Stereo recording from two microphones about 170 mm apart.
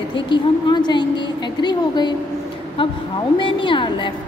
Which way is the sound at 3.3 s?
30° left (ahead or behind).